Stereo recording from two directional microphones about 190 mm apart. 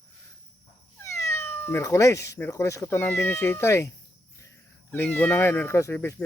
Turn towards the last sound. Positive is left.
turn(degrees=15)  # may be behind; listen again after turning